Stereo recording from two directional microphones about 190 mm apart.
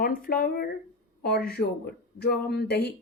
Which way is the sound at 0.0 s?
45° left (ahead or behind).